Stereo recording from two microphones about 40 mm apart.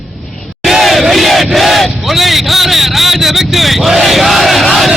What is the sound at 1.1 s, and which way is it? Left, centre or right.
Battle cry, centre.